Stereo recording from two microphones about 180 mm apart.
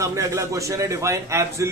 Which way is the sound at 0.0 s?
15° right (ahead or behind).